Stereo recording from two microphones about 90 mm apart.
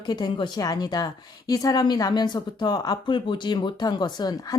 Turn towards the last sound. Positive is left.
turn(degrees=45)  # may be behind; listen again after turning